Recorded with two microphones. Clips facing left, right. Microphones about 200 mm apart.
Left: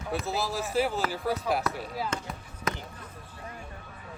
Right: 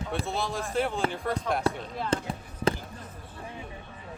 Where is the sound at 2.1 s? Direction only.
30° right (ahead or behind).